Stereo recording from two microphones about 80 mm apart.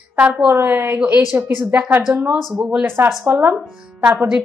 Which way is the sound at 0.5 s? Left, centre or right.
Right.